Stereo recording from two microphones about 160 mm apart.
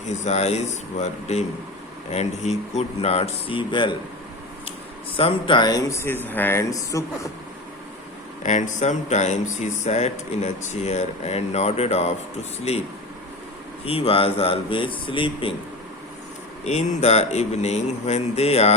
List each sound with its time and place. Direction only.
0.1 s speech: 45° left (ahead or behind)
5.1 s speech: 35° left (ahead or behind)
8.4 s speech: 50° left (ahead or behind)
13.8 s speech: 35° left (ahead or behind)
16.6 s speech: 45° left (ahead or behind)